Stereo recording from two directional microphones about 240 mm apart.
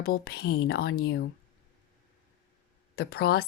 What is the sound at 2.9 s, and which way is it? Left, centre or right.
Speech, left.